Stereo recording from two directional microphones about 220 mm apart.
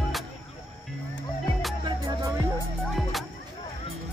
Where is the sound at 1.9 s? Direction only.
15° right (ahead or behind).